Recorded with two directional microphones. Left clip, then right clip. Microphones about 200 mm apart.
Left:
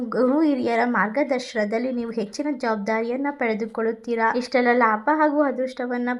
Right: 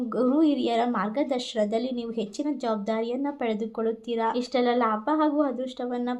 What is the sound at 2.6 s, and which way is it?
A woman's voice, 20° left (ahead or behind).